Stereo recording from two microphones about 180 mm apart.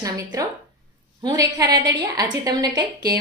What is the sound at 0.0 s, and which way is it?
A woman's voice, 20° right (ahead or behind).